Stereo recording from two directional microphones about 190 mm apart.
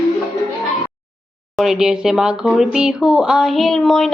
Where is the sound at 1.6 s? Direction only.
5° right (ahead or behind).